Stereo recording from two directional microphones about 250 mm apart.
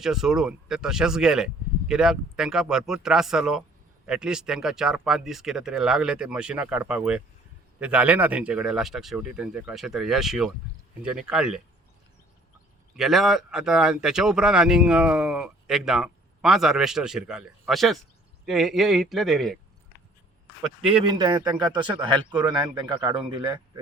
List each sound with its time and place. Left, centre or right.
0.0 s speech: centre
13.0 s speech: centre
20.8 s a man's voice: centre